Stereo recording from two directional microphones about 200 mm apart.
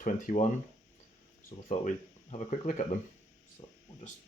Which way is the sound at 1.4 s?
40° left (ahead or behind).